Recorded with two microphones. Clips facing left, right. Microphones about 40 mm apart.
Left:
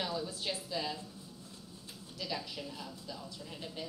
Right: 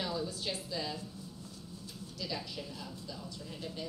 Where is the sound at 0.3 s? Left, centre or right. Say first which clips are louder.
Even; left.